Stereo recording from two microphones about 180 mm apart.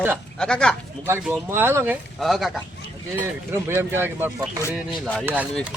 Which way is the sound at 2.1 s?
Centre (ahead or behind).